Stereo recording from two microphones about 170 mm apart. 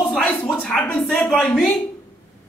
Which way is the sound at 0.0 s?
5° left (ahead or behind).